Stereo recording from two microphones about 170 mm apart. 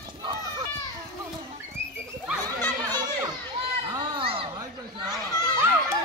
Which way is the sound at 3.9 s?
30° right (ahead or behind).